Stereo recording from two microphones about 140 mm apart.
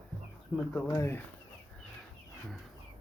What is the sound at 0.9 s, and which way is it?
Speech, 15° left (ahead or behind).